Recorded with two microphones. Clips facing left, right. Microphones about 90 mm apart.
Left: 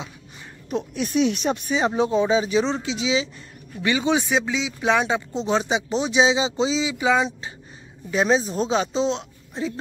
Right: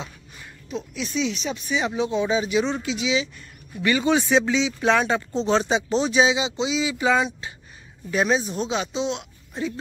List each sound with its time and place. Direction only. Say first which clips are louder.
0.7 s speech: left 5 dB; 50° left (ahead or behind)
1.7 s speech: left 2 dB; 35° left (ahead or behind)
2.2 s speech: left 2 dB; 30° left (ahead or behind)
6.8 s speech: right 2 dB; 15° left (ahead or behind); by 9.2 s 35° left (ahead or behind)